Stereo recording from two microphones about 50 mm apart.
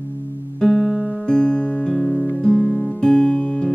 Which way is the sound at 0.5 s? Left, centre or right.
Centre.